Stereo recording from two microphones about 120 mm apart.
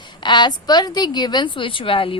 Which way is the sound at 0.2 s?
40° left (ahead or behind).